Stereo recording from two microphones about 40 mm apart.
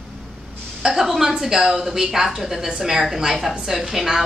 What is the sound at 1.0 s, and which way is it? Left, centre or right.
A woman's voice, centre.